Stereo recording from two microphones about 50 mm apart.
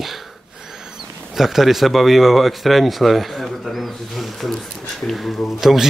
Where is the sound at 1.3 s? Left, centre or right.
Centre.